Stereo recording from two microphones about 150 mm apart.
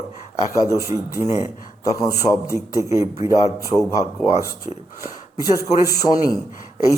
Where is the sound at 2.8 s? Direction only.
20° right (ahead or behind).